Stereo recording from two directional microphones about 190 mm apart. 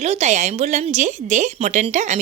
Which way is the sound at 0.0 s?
35° right (ahead or behind).